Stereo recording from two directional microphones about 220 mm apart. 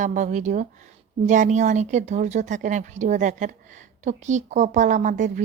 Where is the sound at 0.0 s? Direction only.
35° right (ahead or behind).